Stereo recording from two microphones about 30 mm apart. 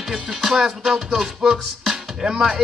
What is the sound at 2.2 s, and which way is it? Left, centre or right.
Music, centre.